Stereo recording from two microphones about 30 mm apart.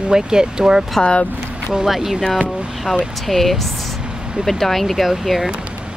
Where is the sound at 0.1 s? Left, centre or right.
Right.